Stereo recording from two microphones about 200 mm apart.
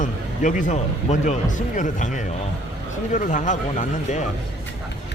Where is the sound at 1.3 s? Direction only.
40° left (ahead or behind).